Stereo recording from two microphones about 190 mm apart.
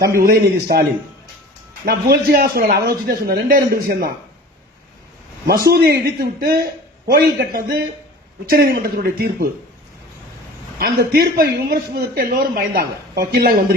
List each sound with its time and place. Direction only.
0.2 s a man's voice: 55° right (ahead or behind)
1.8 s speech: 55° right (ahead or behind)
5.5 s speech: 55° right (ahead or behind)
10.8 s speech: 50° right (ahead or behind)